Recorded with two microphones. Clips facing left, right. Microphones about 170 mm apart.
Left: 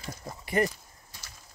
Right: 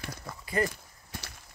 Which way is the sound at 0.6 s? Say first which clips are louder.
Even; 60° right (ahead or behind).